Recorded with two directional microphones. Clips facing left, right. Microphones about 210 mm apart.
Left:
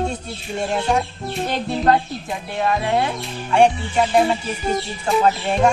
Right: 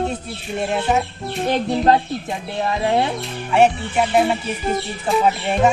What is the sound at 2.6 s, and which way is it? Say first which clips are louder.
Speech: even; 20° right (ahead or behind).